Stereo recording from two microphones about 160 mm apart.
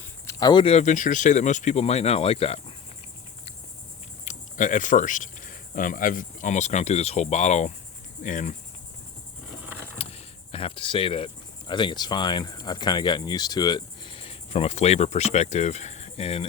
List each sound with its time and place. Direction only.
0.3 s speech: 25° left (ahead or behind)
4.3 s speech: 55° left (ahead or behind)
8.2 s cricket: 50° left (ahead or behind)
10.0 s vehicle: 40° left (ahead or behind)
11.7 s speech: 30° left (ahead or behind)